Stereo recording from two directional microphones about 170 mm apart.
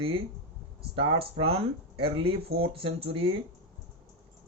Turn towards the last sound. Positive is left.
turn(degrees=-30)  # may be behind; listen again after turning